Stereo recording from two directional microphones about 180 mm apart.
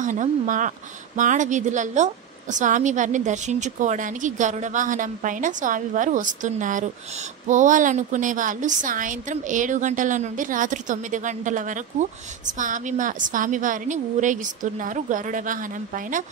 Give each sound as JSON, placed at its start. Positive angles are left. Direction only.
{"t": 0.0, "sound": "a woman's voice", "side_deg": -45}